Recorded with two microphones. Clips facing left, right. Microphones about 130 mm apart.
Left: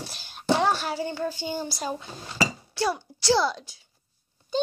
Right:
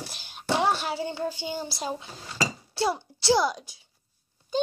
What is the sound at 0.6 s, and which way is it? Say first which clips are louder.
Speech: left 1 dB; 20° right (ahead or behind).